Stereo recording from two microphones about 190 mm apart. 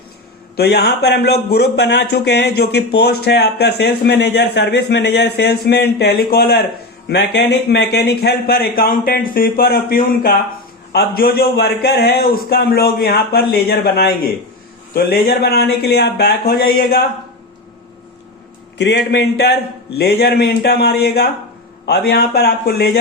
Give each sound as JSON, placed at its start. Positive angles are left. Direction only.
{"t": 0.5, "sound": "a man's voice", "side_deg": 55}
{"t": 18.8, "sound": "a man's voice", "side_deg": 60}